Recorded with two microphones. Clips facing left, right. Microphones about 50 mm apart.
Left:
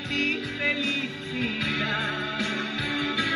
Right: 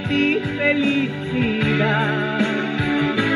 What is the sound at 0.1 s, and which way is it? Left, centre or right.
Music, centre.